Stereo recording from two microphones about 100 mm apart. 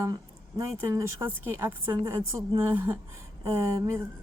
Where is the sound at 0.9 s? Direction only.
25° right (ahead or behind).